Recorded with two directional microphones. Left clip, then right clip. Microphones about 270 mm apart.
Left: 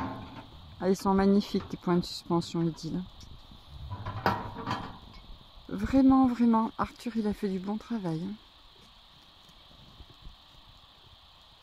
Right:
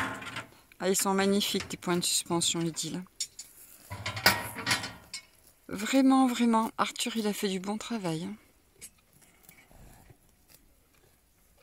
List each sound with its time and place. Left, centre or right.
0.0 s a sound: left
0.7 s speech: centre
3.9 s mechanisms: centre
5.7 s speech: centre